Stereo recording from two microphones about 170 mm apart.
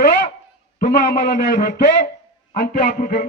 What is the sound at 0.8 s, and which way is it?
Speech, 85° left.